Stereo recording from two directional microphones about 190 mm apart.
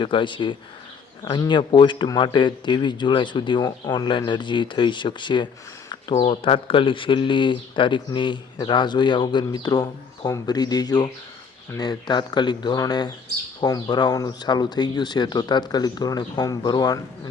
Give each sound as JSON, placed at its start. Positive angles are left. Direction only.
{"t": 0.0, "sound": "speech", "side_deg": 25}